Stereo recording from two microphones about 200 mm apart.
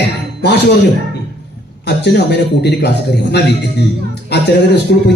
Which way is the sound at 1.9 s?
55° left (ahead or behind).